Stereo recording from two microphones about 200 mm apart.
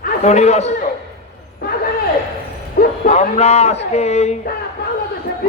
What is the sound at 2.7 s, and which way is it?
Speech, 35° left (ahead or behind).